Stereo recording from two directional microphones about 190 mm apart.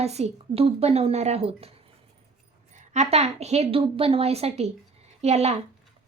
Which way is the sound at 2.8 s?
35° right (ahead or behind).